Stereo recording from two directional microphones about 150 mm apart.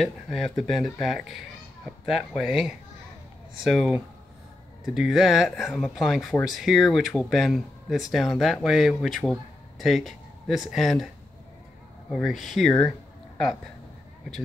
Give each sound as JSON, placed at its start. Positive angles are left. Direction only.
{"t": 0.0, "sound": "speech", "side_deg": 0}
{"t": 12.1, "sound": "speech", "side_deg": 0}